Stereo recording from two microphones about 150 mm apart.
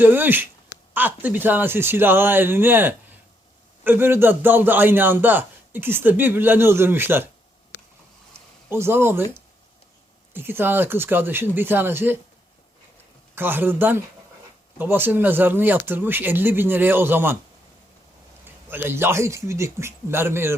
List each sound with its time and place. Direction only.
0.0 s a man's voice: 15° right (ahead or behind)
8.7 s a man's voice: 15° right (ahead or behind)
10.3 s a man's voice: 15° right (ahead or behind)
13.3 s a man's voice: 15° right (ahead or behind)
18.4 s a man's voice: 15° right (ahead or behind)